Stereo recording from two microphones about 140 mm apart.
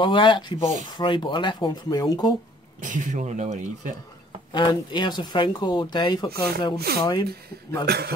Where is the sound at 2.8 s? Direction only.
65° right (ahead or behind).